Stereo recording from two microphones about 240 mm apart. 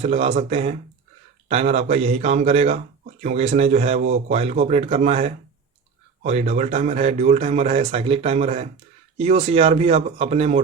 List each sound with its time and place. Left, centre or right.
0.0 s a man's voice: right